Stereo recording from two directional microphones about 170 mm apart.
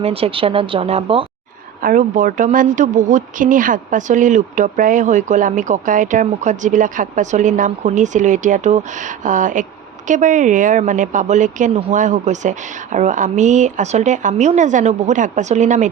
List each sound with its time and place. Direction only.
0.0 s speech: 35° right (ahead or behind)
1.8 s speech: 55° right (ahead or behind)